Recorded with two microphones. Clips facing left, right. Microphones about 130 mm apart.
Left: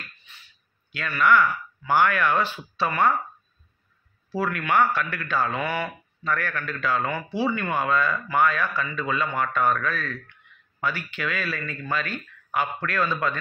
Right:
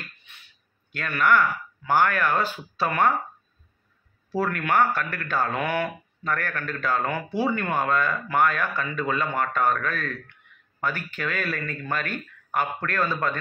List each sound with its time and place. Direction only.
0.9 s speech: 50° right (ahead or behind)
4.4 s speech: 45° right (ahead or behind)